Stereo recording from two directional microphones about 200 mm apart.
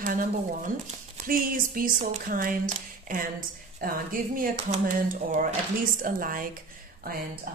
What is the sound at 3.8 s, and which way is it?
Speech, 45° right (ahead or behind).